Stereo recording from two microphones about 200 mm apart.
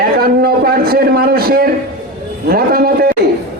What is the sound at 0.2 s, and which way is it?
A man's voice, 50° right (ahead or behind).